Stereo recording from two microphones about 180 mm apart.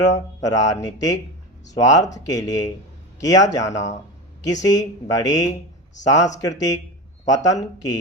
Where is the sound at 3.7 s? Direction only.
40° left (ahead or behind).